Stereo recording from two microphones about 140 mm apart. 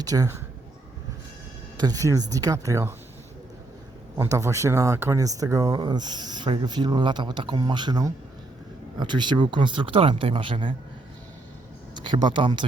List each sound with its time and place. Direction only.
0.0 s speech: 25° right (ahead or behind)
1.8 s speech: 25° right (ahead or behind)
4.2 s speech: 20° right (ahead or behind); by 10.8 s 35° right (ahead or behind)
11.9 s speech: 35° right (ahead or behind)